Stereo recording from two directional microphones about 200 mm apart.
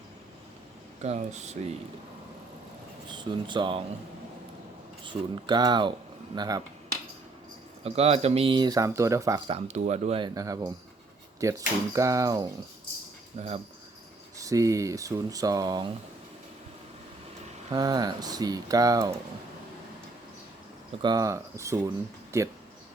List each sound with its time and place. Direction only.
1.0 s speech: 35° right (ahead or behind)
3.1 s speech: 25° right (ahead or behind)
5.0 s speech: 20° right (ahead or behind)
7.9 s speech: 30° right (ahead or behind); by 9.4 s 15° right (ahead or behind)
9.5 s speech: 35° right (ahead or behind); by 12.5 s 15° right (ahead or behind)
13.4 s speech: 35° right (ahead or behind)
14.3 s speech: 15° right (ahead or behind)
17.7 s speech: 20° right (ahead or behind)
21.0 s speech: 20° right (ahead or behind)